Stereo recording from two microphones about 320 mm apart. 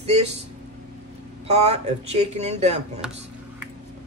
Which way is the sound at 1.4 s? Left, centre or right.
Centre.